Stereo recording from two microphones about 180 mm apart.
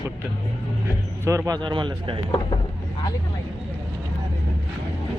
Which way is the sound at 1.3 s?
20° right (ahead or behind).